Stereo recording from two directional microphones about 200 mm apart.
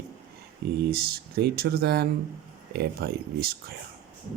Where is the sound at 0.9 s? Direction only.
50° right (ahead or behind).